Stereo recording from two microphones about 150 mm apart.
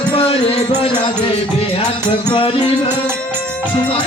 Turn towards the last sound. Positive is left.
turn(degrees=40)  # may be behind; listen again after turning